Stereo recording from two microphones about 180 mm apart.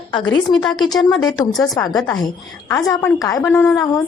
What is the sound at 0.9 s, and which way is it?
A woman's voice, 20° left (ahead or behind).